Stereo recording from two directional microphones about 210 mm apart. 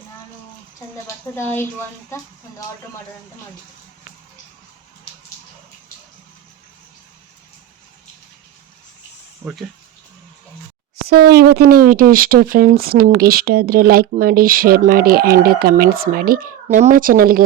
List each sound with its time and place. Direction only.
1.0 s speech: 10° left (ahead or behind)
9.4 s speech: 5° right (ahead or behind)
11.1 s speech: 50° right (ahead or behind)